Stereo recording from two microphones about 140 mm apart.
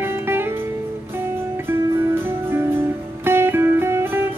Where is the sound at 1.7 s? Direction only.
15° right (ahead or behind).